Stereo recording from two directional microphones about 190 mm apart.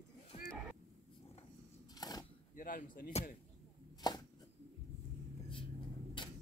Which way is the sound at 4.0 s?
20° left (ahead or behind).